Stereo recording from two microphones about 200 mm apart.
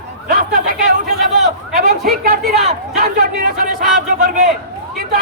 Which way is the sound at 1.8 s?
45° right (ahead or behind).